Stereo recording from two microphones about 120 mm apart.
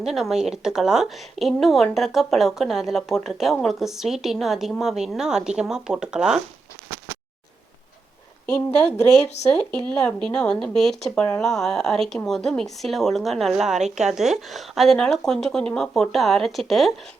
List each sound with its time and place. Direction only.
0.0 s a woman's voice: 5° right (ahead or behind)
9.0 s speech: 65° left (ahead or behind)
9.8 s a woman's voice: 5° left (ahead or behind)